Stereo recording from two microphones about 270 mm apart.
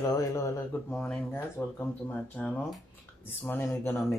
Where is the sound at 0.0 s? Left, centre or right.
Centre.